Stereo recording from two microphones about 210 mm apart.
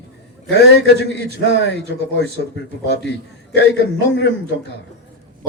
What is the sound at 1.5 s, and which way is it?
A man's voice, 55° left (ahead or behind).